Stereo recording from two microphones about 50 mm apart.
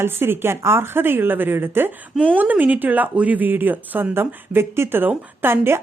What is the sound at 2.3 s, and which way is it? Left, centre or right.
Speech, right.